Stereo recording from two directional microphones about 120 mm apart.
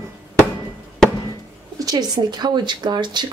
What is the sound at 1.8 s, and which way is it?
Speech, 30° right (ahead or behind).